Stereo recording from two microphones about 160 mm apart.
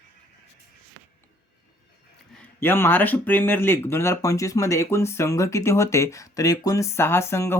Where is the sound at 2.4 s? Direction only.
15° left (ahead or behind).